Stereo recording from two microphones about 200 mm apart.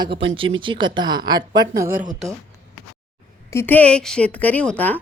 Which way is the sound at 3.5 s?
10° left (ahead or behind).